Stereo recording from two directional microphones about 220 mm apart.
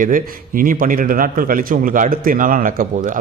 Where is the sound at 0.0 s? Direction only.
40° right (ahead or behind).